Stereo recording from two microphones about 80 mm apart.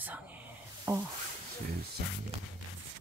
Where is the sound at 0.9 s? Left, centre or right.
Right.